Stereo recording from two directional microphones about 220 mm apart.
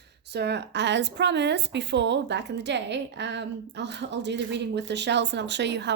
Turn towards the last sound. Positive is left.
turn(degrees=-50)  # may be behind; listen again after turning